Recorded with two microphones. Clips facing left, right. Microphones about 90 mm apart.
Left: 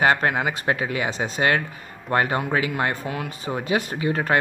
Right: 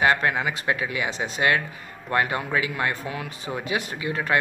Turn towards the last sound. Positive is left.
turn(degrees=40)  # may be behind; listen again after turning